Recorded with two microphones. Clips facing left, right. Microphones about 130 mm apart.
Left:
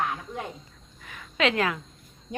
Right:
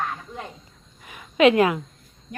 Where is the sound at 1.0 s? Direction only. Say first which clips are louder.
Right 9 dB; 15° right (ahead or behind).